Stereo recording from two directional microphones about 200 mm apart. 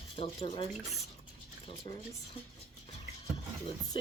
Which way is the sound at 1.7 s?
25° left (ahead or behind).